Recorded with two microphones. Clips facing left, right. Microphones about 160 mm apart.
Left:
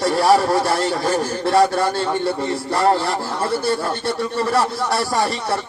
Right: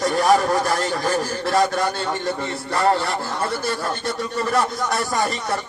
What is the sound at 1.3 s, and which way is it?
Speech, 30° left (ahead or behind).